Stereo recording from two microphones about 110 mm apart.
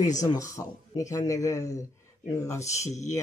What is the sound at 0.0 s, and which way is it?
Speech, 90° left.